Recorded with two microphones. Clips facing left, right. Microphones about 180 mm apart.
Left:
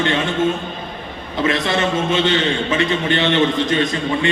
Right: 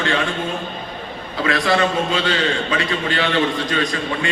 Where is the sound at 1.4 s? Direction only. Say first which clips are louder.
Even; 20° left (ahead or behind).